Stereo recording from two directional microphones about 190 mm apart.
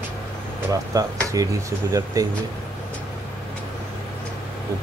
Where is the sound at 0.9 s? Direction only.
15° right (ahead or behind).